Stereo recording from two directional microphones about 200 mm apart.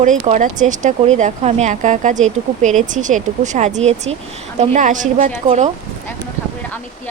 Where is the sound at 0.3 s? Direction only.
40° right (ahead or behind).